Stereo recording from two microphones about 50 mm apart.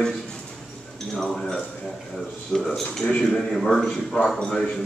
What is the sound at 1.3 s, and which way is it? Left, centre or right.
A man's voice, centre.